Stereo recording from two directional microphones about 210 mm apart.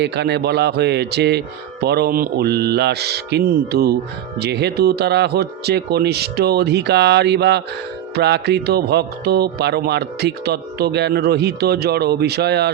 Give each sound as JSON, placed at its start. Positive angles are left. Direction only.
{"t": 0.0, "sound": "speech", "side_deg": -50}